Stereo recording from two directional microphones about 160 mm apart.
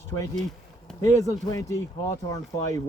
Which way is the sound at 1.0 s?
20° left (ahead or behind).